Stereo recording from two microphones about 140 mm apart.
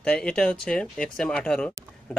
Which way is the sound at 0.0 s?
5° left (ahead or behind).